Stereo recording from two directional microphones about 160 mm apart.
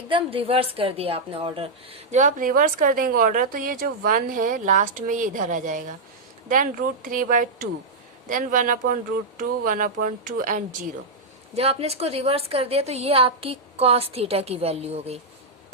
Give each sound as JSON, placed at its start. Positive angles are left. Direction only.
{"t": 0.1, "sound": "a woman's voice", "side_deg": -35}
{"t": 11.5, "sound": "a woman's voice", "side_deg": -40}